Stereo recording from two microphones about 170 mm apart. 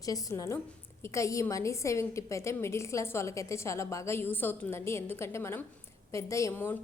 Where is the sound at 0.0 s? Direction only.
20° left (ahead or behind).